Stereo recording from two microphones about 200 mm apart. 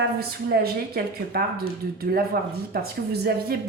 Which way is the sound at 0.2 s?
50° right (ahead or behind).